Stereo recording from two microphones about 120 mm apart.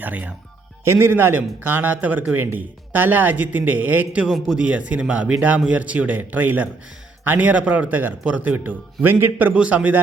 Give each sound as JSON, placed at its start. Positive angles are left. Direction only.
{"t": 0.0, "sound": "a man's voice", "side_deg": -15}